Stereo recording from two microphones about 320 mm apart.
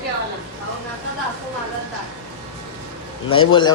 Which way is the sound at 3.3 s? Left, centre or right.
Centre.